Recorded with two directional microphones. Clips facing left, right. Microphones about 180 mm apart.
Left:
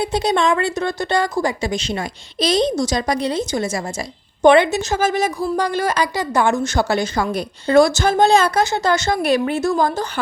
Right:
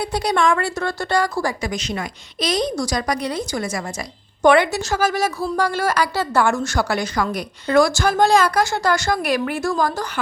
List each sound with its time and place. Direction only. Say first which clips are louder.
0.0 s a woman's voice: left 2 dB; 20° left (ahead or behind)